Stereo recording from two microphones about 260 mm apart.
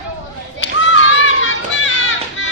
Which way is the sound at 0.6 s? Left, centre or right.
Left.